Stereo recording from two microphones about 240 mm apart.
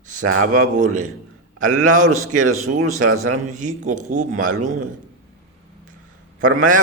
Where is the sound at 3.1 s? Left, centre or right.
Right.